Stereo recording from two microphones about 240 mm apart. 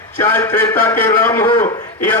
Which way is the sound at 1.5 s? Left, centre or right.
Left.